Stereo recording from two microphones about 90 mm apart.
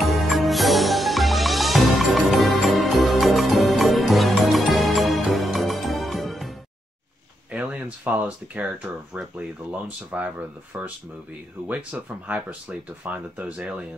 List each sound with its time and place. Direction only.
0.0 s music: centre (ahead or behind)
7.5 s a sound: 15° right (ahead or behind)
9.7 s speech: 15° right (ahead or behind)